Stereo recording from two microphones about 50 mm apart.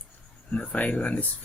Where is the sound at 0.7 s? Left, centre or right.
Left.